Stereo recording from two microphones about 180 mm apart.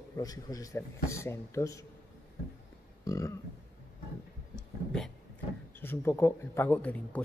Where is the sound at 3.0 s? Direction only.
15° left (ahead or behind).